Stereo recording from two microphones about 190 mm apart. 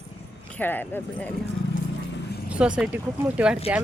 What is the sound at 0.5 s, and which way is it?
Speech, 10° left (ahead or behind).